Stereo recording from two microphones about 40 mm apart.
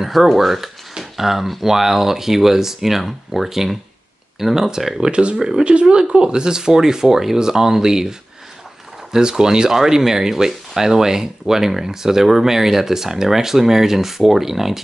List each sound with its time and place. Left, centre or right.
0.0 s speech: centre
0.9 s a sound: centre
1.6 s speech: centre
5.1 s speech: right; by 14.8 s centre